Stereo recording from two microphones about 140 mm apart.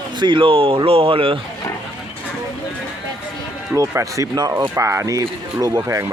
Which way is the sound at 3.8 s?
25° right (ahead or behind).